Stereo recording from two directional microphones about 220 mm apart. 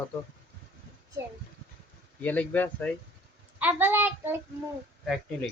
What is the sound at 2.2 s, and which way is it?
Speech, 5° left (ahead or behind).